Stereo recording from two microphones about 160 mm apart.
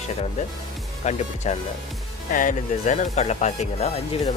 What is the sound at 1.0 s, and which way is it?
Speech, 45° left (ahead or behind).